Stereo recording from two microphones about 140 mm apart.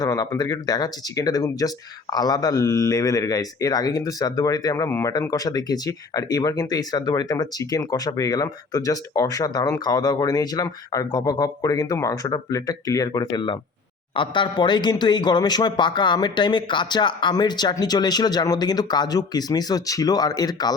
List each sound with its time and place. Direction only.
0.0 s a man's voice: 25° left (ahead or behind)